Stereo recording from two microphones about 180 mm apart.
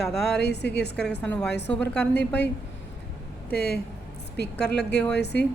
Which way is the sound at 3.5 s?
60° left (ahead or behind).